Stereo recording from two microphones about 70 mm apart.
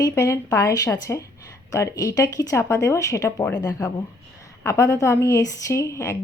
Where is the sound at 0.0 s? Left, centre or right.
Left.